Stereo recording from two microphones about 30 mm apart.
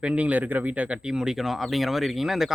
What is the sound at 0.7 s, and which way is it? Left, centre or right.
Speech, right.